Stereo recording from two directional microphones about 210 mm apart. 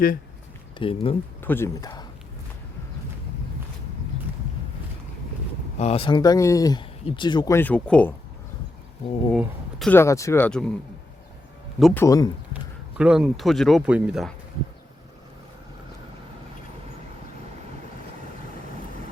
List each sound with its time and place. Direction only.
0.8 s speech: 25° left (ahead or behind)
1.4 s speech: 10° left (ahead or behind)
5.8 s speech: 25° left (ahead or behind); by 8.1 s 5° left (ahead or behind)
9.3 s speech: centre (ahead or behind)
11.8 s speech: centre (ahead or behind)
12.0 s speech: 15° left (ahead or behind)
13.0 s speech: 5° right (ahead or behind)